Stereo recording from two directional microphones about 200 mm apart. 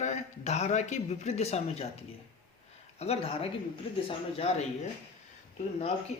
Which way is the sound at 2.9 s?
30° left (ahead or behind).